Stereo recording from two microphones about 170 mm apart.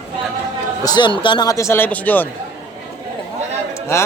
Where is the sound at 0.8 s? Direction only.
25° left (ahead or behind); by 2.3 s 10° left (ahead or behind).